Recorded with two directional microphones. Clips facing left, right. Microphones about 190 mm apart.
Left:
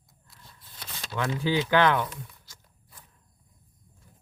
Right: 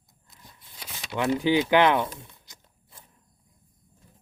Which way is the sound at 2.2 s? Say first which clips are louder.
Left 4 dB; 20° right (ahead or behind).